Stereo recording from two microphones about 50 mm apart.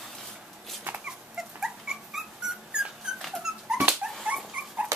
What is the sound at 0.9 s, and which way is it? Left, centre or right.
Dog, right.